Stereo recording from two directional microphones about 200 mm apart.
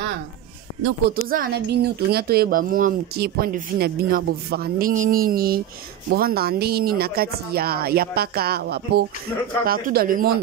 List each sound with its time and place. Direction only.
1.3 s speech: 50° right (ahead or behind)